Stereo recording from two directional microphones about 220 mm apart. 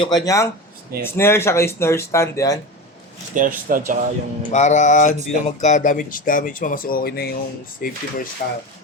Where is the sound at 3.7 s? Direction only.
40° right (ahead or behind).